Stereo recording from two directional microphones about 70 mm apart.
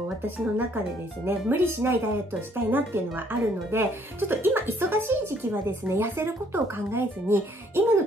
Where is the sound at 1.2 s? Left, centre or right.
Right.